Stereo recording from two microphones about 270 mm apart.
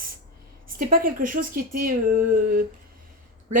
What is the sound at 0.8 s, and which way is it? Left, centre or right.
Speech, right.